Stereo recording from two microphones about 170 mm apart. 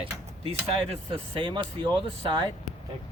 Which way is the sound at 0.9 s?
30° right (ahead or behind).